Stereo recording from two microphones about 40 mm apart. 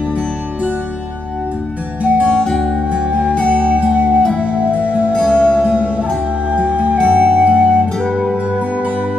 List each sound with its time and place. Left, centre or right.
2.0 s music: right
2.5 s music: centre
2.9 s music: right
5.1 s music: left
5.8 s music: right